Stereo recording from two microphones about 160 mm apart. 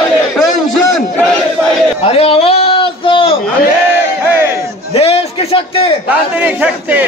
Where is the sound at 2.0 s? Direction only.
35° left (ahead or behind).